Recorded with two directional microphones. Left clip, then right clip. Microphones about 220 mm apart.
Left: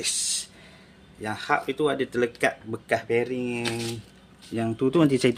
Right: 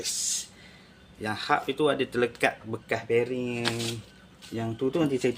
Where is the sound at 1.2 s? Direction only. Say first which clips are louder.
Left 1 dB; 10° left (ahead or behind).